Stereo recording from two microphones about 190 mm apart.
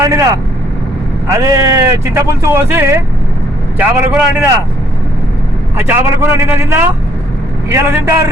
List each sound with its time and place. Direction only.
0.0 s vehicle: 15° right (ahead or behind)
1.3 s speech: 20° right (ahead or behind)
5.7 s speech: 10° right (ahead or behind)